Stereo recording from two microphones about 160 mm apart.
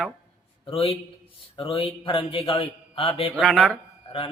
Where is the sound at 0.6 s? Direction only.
35° left (ahead or behind).